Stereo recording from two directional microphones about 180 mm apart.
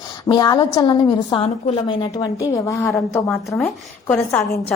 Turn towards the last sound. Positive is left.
turn(degrees=10)  # may be behind; listen again after turning